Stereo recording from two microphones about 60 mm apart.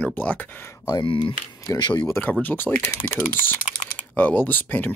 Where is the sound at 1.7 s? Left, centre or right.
Left.